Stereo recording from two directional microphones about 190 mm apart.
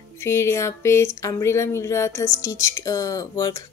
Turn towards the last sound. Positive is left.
turn(degrees=15)  # may be behind; listen again after turning